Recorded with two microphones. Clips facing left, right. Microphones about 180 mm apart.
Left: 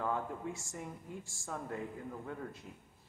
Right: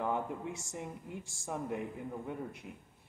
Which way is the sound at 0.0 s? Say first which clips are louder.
Right 2 dB; 20° right (ahead or behind).